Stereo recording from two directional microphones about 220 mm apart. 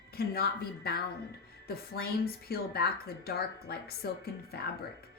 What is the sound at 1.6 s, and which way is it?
A woman's voice, 45° left (ahead or behind).